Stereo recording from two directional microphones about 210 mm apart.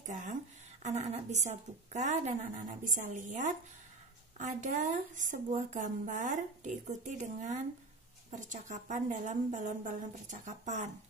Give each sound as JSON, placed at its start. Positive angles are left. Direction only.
{"t": 0.0, "sound": "a woman's voice", "side_deg": -35}